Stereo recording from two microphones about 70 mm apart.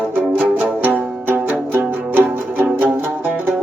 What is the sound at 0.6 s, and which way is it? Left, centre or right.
Music, right.